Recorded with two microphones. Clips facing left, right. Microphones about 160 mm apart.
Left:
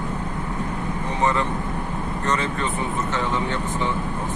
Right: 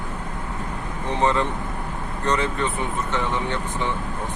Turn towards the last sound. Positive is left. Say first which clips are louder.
# left 1 dB
turn(degrees=15)  # may be behind; listen again after turning